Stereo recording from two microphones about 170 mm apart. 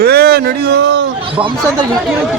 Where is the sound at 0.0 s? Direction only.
65° right (ahead or behind).